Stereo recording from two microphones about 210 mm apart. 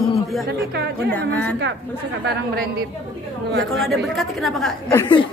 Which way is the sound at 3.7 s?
Centre (ahead or behind).